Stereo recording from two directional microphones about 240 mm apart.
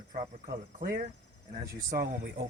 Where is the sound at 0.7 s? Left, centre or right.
Right.